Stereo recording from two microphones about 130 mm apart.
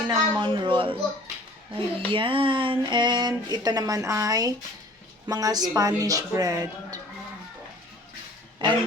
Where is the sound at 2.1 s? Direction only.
40° right (ahead or behind).